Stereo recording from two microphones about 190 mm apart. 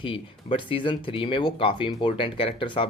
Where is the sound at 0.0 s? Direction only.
30° left (ahead or behind).